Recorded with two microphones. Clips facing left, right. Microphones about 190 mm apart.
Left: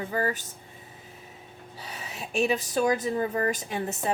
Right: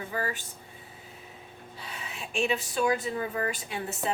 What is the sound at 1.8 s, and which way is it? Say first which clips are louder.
A woman's voice: left 2 dB; 40° left (ahead or behind).